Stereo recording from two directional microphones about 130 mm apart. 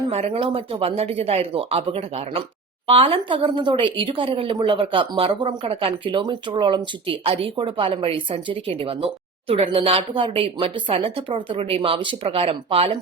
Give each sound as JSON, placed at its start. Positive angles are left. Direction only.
{"t": 0.1, "sound": "speech", "side_deg": -50}